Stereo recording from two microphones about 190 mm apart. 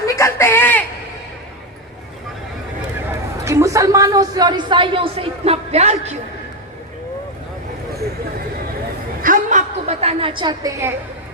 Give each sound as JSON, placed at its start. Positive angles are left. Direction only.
{"t": 0.0, "sound": "speech", "side_deg": 15}
{"t": 3.4, "sound": "a woman's voice", "side_deg": -15}
{"t": 9.2, "sound": "a sound", "side_deg": -45}